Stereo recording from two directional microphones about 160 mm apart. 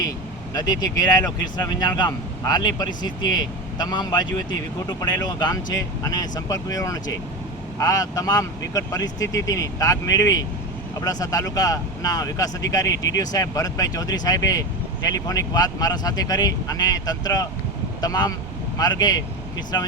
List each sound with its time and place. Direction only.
0.5 s speech: 25° left (ahead or behind)